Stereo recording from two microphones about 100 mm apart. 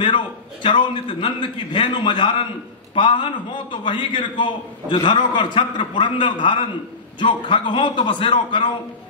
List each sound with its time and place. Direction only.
0.0 s a man's voice: 50° left (ahead or behind)